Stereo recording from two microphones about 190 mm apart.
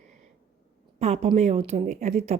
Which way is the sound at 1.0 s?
35° right (ahead or behind).